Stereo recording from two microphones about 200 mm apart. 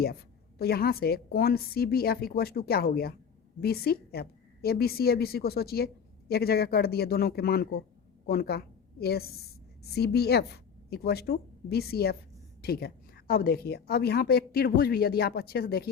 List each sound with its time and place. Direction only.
0.6 s a woman's voice: 50° left (ahead or behind)